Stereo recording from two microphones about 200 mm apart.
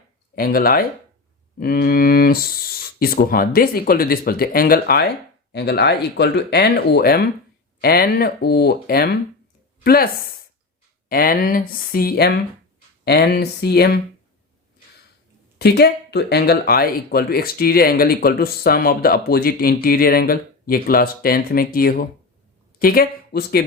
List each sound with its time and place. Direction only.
0.3 s speech: 45° left (ahead or behind)
11.1 s speech: 45° left (ahead or behind)
15.5 s speech: 55° left (ahead or behind)